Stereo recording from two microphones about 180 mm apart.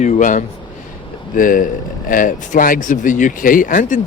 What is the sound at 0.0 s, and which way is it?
Speech, 45° left (ahead or behind).